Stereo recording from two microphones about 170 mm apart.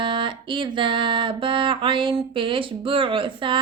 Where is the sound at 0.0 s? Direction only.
30° right (ahead or behind).